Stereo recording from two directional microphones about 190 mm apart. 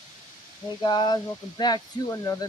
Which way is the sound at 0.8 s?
25° left (ahead or behind).